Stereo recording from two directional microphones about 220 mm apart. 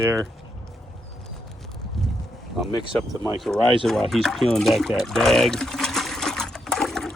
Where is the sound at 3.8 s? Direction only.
Centre (ahead or behind).